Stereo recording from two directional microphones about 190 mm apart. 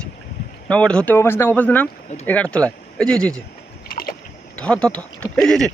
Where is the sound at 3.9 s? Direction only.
50° left (ahead or behind).